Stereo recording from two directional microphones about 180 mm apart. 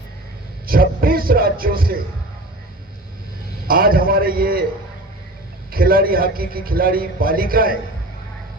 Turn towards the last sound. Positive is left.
turn(degrees=-55)  # may be behind; listen again after turning